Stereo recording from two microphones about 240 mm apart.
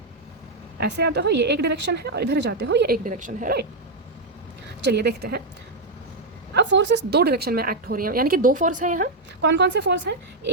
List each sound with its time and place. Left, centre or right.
0.8 s a woman's voice: right
4.9 s a woman's voice: right
6.5 s speech: right
9.5 s a woman's voice: right